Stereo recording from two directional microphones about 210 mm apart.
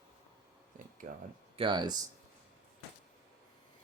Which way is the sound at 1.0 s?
40° right (ahead or behind).